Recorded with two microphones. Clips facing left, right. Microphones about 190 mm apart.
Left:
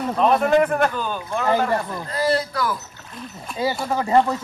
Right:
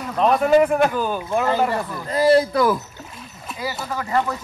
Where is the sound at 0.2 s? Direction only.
Centre (ahead or behind).